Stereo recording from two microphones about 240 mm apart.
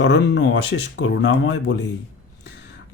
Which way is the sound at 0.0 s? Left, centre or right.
Left.